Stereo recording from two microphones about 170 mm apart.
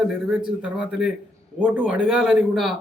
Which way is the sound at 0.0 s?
5° right (ahead or behind).